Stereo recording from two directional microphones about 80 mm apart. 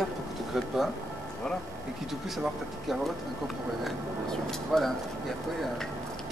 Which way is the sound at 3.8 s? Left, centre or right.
Centre.